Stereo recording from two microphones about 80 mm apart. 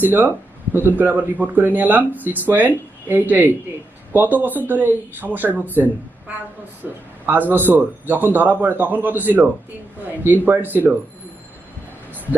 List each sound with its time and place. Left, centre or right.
0.0 s speech: right